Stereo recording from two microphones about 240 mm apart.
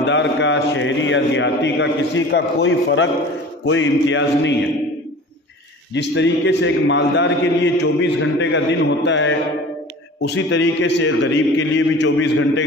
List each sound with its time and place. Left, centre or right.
0.0 s a man's voice: left
5.9 s a man's voice: left